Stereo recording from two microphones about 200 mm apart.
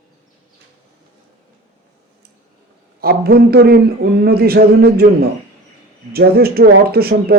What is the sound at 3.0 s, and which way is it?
Speech, 50° right (ahead or behind).